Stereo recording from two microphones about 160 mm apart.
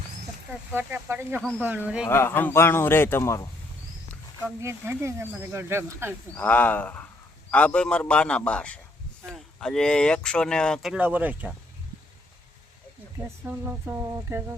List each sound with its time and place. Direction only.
0.7 s speech: 10° right (ahead or behind)
2.0 s speech: 15° left (ahead or behind)
4.6 s speech: 15° right (ahead or behind)
6.3 s speech: 10° left (ahead or behind)
10.9 s speech: 10° right (ahead or behind)
13.1 s speech: 15° right (ahead or behind)